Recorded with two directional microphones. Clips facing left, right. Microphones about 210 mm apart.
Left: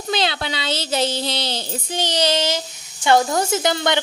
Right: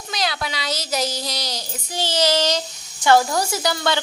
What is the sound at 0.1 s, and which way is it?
Speech, 30° left (ahead or behind).